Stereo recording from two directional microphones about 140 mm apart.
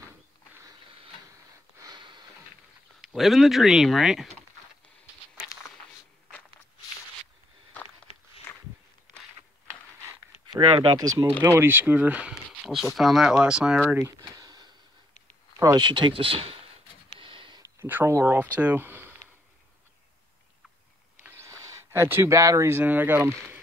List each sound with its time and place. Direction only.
1.8 s sniff: 30° right (ahead or behind)
3.0 s speech: centre (ahead or behind)
10.6 s speech: 40° right (ahead or behind)
11.0 s speech: 25° right (ahead or behind); by 13.8 s 5° right (ahead or behind)
13.9 s a sound: 25° right (ahead or behind)
15.6 s speech: 30° right (ahead or behind)
17.2 s a sound: 35° right (ahead or behind)
17.6 s speech: 15° right (ahead or behind)
21.2 s speech: 15° right (ahead or behind)